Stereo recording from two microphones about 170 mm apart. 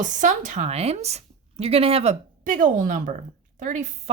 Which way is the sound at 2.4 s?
50° right (ahead or behind).